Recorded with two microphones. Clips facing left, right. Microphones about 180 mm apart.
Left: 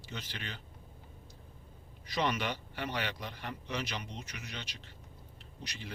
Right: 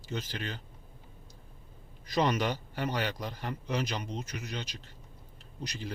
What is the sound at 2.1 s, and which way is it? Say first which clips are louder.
A man's voice: right 5 dB; 40° right (ahead or behind).